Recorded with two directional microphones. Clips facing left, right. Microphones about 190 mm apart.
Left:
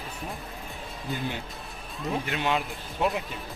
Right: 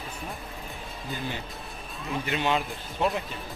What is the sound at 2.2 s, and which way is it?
Speech, centre (ahead or behind).